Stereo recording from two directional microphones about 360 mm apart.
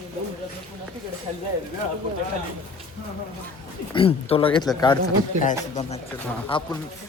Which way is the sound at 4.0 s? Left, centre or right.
Centre.